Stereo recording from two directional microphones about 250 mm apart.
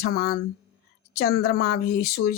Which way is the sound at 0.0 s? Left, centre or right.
Left.